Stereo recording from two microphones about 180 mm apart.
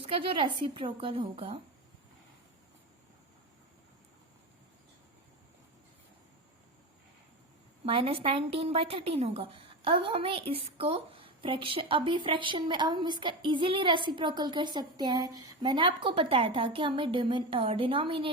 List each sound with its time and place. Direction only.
0.0 s a woman's voice: 30° right (ahead or behind)
7.9 s a woman's voice: 30° right (ahead or behind)